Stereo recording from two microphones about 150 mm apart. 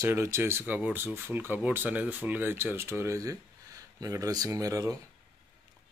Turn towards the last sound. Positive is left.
turn(degrees=-20)  # may be behind; listen again after turning